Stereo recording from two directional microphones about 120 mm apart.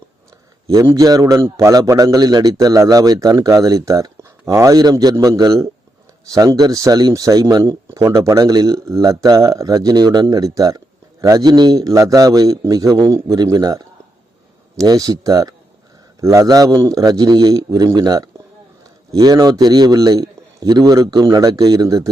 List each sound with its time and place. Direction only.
0.9 s a man's voice: 30° right (ahead or behind)